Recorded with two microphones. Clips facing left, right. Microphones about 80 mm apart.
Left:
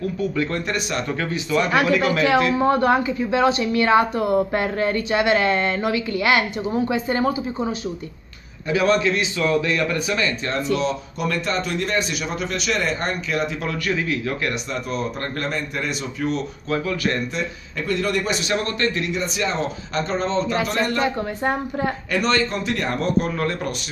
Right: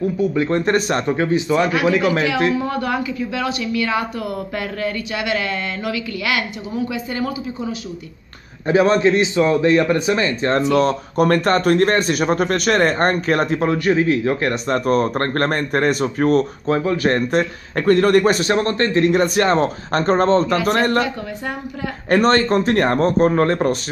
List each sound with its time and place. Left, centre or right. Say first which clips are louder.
0.2 s speech: right 5 dB; right
0.7 s a man's voice: right 7 dB; right
1.0 s speech: right 7 dB; right
2.5 s a woman's voice: left 4 dB; left
8.6 s a man's voice: right 4 dB; right
13.7 s a man's voice: right 7 dB; right
14.7 s a man's voice: right 9 dB; right
16.6 s a man's voice: right 5 dB; right
17.3 s a man's voice: right 9 dB; right
19.1 s a man's voice: right 8 dB; right
22.1 s a man's voice: right 8 dB; right